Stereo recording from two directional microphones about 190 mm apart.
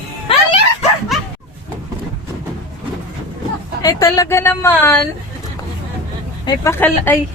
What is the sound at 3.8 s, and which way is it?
Speech, 20° left (ahead or behind).